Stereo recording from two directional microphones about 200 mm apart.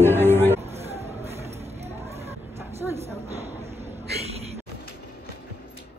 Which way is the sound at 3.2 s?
30° right (ahead or behind).